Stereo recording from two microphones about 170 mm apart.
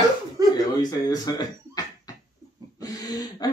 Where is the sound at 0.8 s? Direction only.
25° left (ahead or behind).